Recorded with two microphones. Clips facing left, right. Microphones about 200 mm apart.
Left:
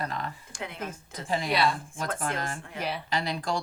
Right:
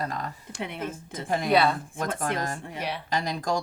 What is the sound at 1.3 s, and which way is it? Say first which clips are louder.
Speech: right 2 dB; 50° right (ahead or behind).